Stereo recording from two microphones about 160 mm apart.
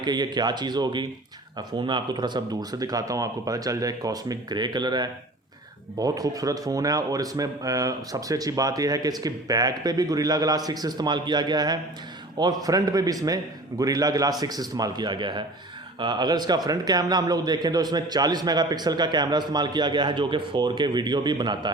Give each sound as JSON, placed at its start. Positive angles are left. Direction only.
{"t": 0.0, "sound": "speech", "side_deg": -25}